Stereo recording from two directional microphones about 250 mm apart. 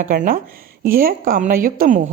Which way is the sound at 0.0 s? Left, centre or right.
Right.